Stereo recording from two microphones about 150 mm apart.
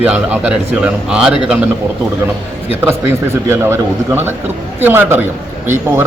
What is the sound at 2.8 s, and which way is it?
Speech, 15° right (ahead or behind).